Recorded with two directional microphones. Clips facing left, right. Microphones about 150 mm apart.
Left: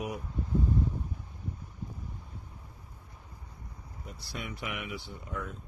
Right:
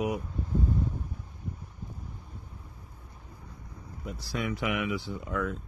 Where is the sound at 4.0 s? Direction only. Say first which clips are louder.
Right 8 dB; 90° right.